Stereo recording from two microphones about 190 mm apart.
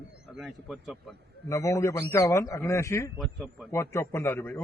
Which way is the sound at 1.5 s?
15° left (ahead or behind).